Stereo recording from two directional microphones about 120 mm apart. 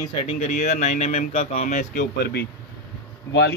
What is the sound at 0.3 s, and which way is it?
Speech, 65° left (ahead or behind).